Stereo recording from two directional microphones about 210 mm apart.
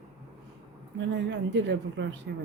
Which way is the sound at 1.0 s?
60° right (ahead or behind).